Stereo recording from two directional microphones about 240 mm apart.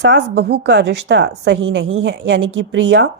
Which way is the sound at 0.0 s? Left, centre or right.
Right.